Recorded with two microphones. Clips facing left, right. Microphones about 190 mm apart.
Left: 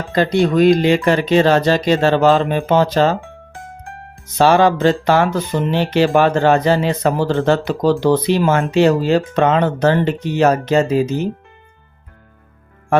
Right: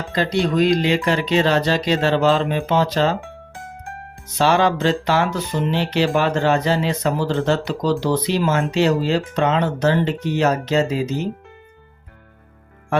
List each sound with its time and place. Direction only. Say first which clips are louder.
0.1 s speech: left 5 dB; 50° left (ahead or behind)
4.4 s speech: left 5 dB; 45° left (ahead or behind)